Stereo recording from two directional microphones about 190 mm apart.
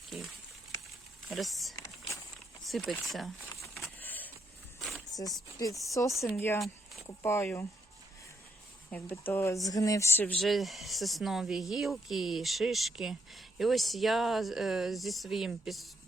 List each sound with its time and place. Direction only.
1.3 s speech: centre (ahead or behind)
1.7 s a sound: 15° left (ahead or behind)
2.6 s speech: centre (ahead or behind)
3.8 s a sound: 5° left (ahead or behind)
5.5 s speech: 15° left (ahead or behind)
8.9 s speech: 10° left (ahead or behind)